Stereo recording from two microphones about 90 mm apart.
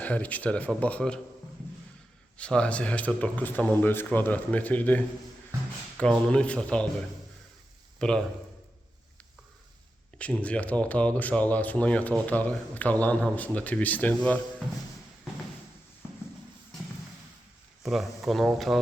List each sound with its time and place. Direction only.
0.0 s speech: 15° left (ahead or behind)
2.4 s speech: 10° left (ahead or behind)
7.9 s a man's voice: 10° left (ahead or behind)
10.2 s speech: 15° left (ahead or behind)
17.8 s speech: centre (ahead or behind)